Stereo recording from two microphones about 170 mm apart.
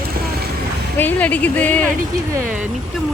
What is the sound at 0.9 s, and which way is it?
Speech, 10° left (ahead or behind).